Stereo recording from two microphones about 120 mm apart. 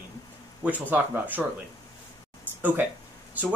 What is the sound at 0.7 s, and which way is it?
Speech, 15° right (ahead or behind).